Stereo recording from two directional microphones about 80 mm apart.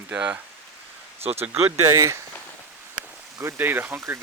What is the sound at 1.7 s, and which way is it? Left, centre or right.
Speech, right.